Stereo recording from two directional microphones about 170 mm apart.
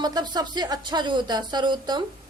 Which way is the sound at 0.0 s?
25° right (ahead or behind).